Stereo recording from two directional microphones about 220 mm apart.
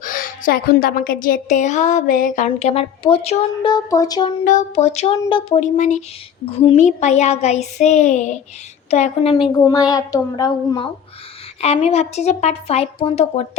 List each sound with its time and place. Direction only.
0.0 s a woman's voice: 40° left (ahead or behind); by 4.3 s 15° left (ahead or behind)
4.4 s a woman's voice: 35° left (ahead or behind)
9.5 s a woman's voice: 15° left (ahead or behind)
11.6 s speech: 30° left (ahead or behind)